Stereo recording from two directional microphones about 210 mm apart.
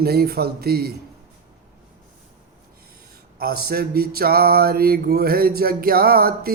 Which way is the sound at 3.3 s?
45° right (ahead or behind).